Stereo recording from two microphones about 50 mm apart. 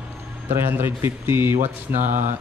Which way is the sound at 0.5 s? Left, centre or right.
Right.